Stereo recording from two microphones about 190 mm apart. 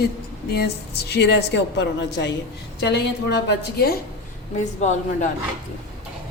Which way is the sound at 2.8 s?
65° left (ahead or behind).